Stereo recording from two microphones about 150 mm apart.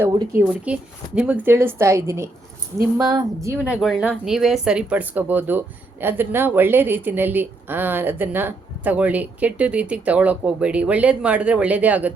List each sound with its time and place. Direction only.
0.3 s speech: 10° right (ahead or behind)
3.6 s speech: 5° right (ahead or behind)